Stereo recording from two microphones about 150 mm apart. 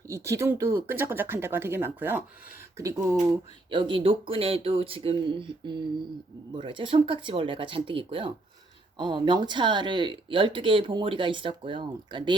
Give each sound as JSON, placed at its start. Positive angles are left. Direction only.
{"t": 0.1, "sound": "speech", "side_deg": -20}
{"t": 3.7, "sound": "speech", "side_deg": -35}